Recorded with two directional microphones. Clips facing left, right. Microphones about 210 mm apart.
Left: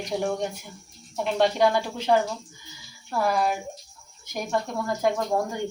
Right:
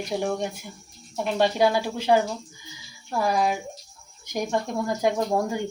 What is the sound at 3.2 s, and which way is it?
A woman's voice, 15° right (ahead or behind).